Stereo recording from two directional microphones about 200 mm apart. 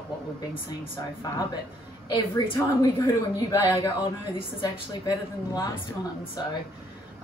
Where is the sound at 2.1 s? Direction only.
20° left (ahead or behind).